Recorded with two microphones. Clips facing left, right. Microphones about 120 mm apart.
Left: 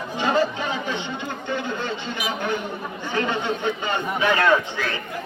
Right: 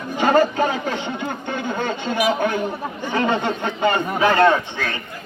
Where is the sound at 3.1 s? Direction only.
50° right (ahead or behind).